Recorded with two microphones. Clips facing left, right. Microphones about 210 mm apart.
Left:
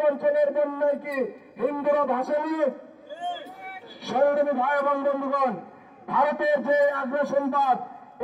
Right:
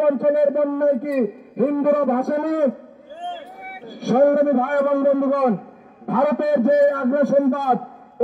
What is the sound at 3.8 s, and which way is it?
A man's voice, 50° right (ahead or behind).